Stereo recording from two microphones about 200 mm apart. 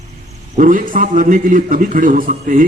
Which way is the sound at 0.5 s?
40° right (ahead or behind).